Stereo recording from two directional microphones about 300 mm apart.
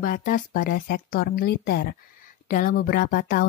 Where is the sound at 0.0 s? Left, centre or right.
Left.